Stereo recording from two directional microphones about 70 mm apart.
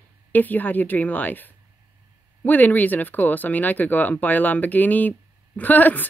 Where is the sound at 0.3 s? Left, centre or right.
Left.